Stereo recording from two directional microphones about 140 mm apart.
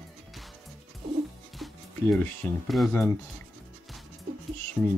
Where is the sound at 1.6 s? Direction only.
Centre (ahead or behind).